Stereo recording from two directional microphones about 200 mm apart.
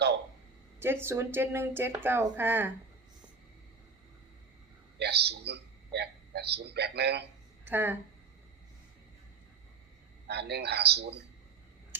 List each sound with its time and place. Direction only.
1.0 s speech: 10° right (ahead or behind)
4.9 s a man's voice: 55° right (ahead or behind)
7.6 s speech: 10° right (ahead or behind)
10.2 s a man's voice: 55° right (ahead or behind)